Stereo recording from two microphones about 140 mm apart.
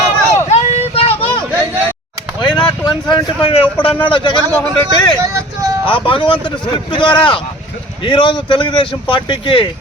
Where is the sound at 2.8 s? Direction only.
35° left (ahead or behind).